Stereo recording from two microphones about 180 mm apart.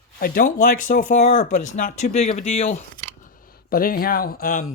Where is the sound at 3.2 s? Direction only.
50° left (ahead or behind).